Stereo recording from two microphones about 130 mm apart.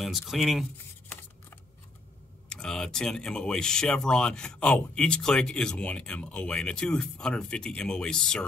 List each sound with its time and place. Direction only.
0.0 s speech: centre (ahead or behind)
1.0 s a sound: 15° left (ahead or behind)
2.5 s speech: 5° left (ahead or behind)